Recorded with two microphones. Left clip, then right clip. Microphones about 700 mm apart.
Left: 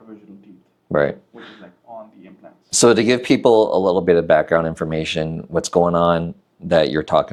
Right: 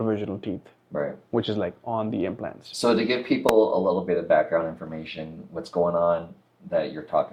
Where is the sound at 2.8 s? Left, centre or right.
Left.